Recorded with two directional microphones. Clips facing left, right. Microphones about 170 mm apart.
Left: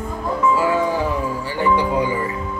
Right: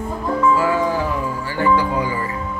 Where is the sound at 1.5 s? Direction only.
20° left (ahead or behind).